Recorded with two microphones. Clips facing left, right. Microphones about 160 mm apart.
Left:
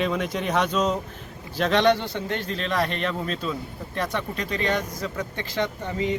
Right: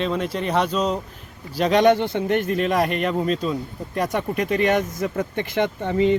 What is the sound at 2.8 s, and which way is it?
Speech, 5° right (ahead or behind).